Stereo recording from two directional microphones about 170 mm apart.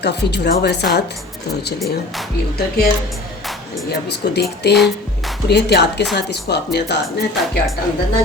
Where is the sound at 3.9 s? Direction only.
75° left (ahead or behind).